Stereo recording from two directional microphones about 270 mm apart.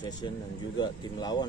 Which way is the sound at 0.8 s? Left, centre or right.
Centre.